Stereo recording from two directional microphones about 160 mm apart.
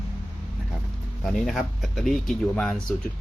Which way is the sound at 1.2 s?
Centre (ahead or behind).